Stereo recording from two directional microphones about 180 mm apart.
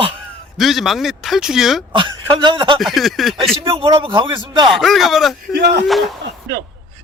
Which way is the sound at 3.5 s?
30° right (ahead or behind).